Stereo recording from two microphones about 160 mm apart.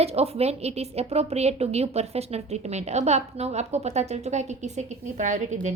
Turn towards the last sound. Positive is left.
turn(degrees=-50)  # may be behind; listen again after turning